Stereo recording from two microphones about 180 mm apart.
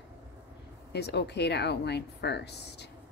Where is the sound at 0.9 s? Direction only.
70° left (ahead or behind).